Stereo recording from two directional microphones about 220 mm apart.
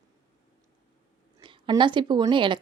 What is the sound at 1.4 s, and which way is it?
A woman's voice, 20° right (ahead or behind).